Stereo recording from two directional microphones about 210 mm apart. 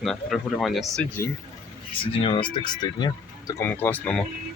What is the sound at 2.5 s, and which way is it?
Speech, 20° left (ahead or behind).